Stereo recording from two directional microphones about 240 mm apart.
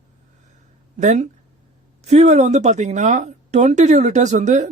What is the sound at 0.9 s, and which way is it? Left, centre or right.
Speech, right.